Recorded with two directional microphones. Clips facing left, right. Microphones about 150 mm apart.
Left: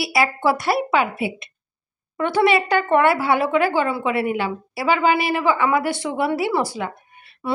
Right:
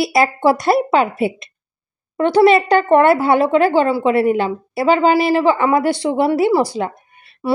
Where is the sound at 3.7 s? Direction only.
30° right (ahead or behind).